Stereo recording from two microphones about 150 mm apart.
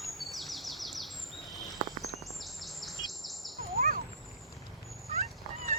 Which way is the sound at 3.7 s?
70° right (ahead or behind).